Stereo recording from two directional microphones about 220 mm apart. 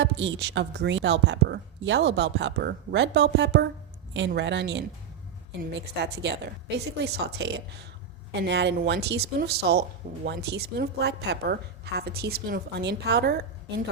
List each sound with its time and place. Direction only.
0.0 s a woman's voice: 55° right (ahead or behind)